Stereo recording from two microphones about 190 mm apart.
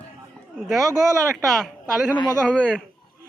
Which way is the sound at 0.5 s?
Centre (ahead or behind).